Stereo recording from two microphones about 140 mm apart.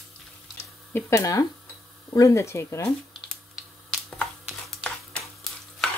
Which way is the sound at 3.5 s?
5° left (ahead or behind).